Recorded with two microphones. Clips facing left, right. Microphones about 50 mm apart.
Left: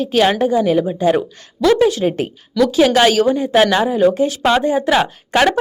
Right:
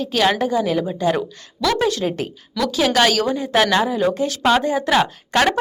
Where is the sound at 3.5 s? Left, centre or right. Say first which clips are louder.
Left 2 dB; centre.